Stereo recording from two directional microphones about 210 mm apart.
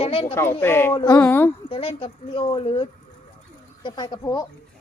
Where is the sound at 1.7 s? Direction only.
25° left (ahead or behind).